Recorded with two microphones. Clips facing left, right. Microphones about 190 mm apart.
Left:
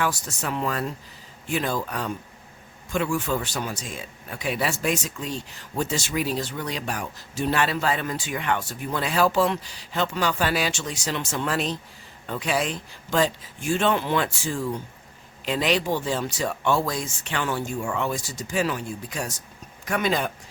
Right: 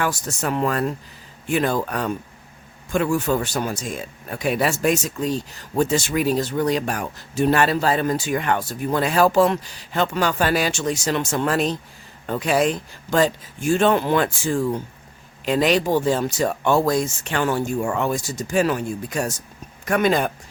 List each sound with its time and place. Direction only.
0.0 s speech: 50° right (ahead or behind)
2.9 s speech: 45° right (ahead or behind)